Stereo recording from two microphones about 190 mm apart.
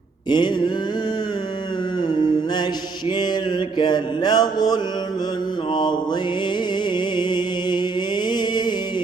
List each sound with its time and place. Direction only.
0.3 s mantra: 25° left (ahead or behind)
3.1 s mantra: 20° left (ahead or behind)
3.8 s speech: 20° left (ahead or behind)
6.9 s music: 25° left (ahead or behind)